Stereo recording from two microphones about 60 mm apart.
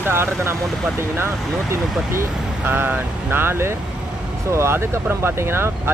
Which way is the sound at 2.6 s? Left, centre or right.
Right.